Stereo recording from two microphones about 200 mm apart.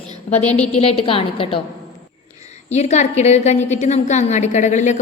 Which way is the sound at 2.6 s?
35° left (ahead or behind).